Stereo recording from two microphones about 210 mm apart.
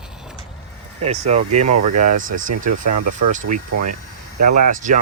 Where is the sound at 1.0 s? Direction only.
30° right (ahead or behind).